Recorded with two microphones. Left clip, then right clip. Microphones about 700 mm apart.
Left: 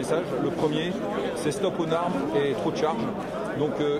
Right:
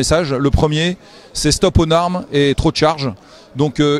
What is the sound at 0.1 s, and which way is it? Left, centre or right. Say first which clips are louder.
Speech: right 12 dB; right.